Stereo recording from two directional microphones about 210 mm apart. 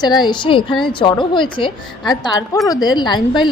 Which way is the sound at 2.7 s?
20° left (ahead or behind).